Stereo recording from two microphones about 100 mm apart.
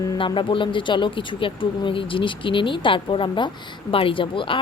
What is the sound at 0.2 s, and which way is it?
Speech, 55° left (ahead or behind).